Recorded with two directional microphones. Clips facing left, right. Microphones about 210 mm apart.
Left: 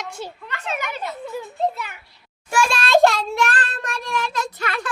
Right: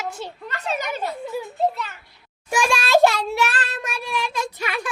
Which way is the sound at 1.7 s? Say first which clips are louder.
Right 1 dB; 10° left (ahead or behind).